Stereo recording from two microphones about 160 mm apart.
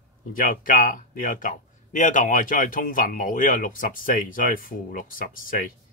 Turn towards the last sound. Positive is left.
turn(degrees=60)  # may be behind; listen again after turning